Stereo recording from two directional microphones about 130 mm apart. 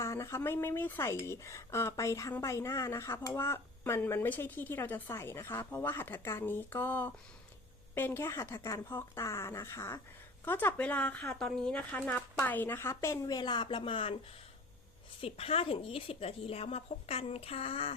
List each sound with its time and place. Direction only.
0.0 s speech: 20° left (ahead or behind); by 14.2 s 45° left (ahead or behind)
15.2 s a woman's voice: 50° left (ahead or behind)